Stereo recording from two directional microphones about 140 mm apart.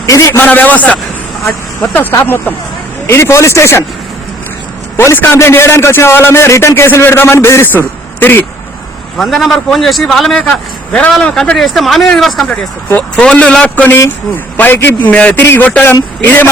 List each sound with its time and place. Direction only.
0.0 s a man's voice: 20° left (ahead or behind)
4.9 s a man's voice: 15° left (ahead or behind)
9.1 s a man's voice: centre (ahead or behind)